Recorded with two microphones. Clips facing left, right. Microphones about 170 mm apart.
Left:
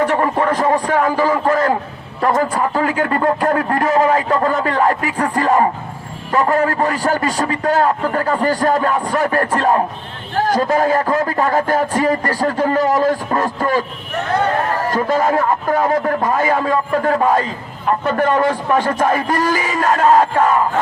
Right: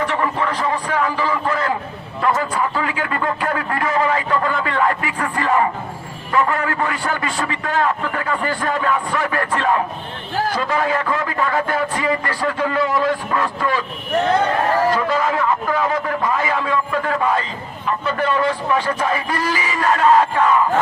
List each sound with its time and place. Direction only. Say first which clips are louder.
0.0 s a man's voice: left 5 dB; 45° left (ahead or behind)
14.8 s a man's voice: left 2 dB; 45° left (ahead or behind)